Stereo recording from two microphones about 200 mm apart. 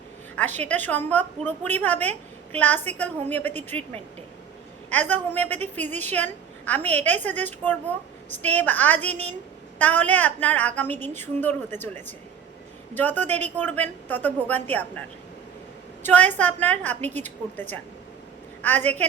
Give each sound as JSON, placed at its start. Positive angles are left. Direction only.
{"t": 0.3, "sound": "a woman's voice", "side_deg": 10}
{"t": 4.9, "sound": "a woman's voice", "side_deg": 10}
{"t": 16.0, "sound": "a woman's voice", "side_deg": 10}